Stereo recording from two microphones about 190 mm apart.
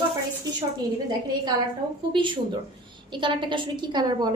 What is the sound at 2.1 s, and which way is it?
A woman's voice, 25° right (ahead or behind).